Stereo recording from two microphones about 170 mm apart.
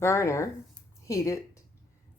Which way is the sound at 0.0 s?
15° left (ahead or behind).